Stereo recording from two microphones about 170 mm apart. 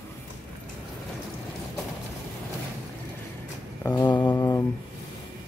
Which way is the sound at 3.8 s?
15° left (ahead or behind).